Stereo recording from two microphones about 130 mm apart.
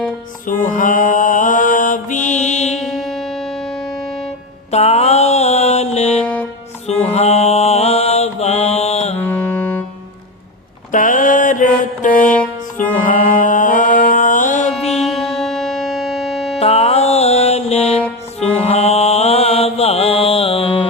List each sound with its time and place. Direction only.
0.4 s mantra: 90° left; by 2.7 s 60° left (ahead or behind)
2.7 s music: centre (ahead or behind)
4.7 s mantra: 55° left (ahead or behind)
9.2 s music: 15° left (ahead or behind)
10.9 s mantra: 80° left
11.8 s music: 90° left
14.8 s music: 55° left (ahead or behind)
15.0 s music: centre (ahead or behind)
16.6 s music: 55° left (ahead or behind)
18.6 s mantra: 55° left (ahead or behind)